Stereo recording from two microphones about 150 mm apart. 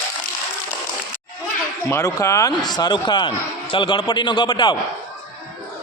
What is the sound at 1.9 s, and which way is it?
A man's voice, 20° left (ahead or behind).